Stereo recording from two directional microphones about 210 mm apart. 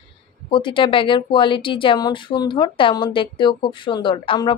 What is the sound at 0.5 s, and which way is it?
Speech, 25° left (ahead or behind).